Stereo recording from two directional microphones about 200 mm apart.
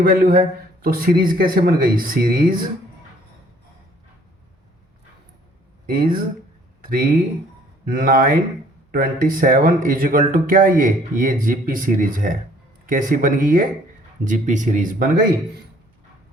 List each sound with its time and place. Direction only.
0.0 s speech: 45° right (ahead or behind)
5.8 s speech: 45° right (ahead or behind)